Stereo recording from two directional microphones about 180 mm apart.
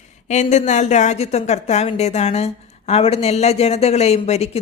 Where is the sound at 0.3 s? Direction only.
40° left (ahead or behind).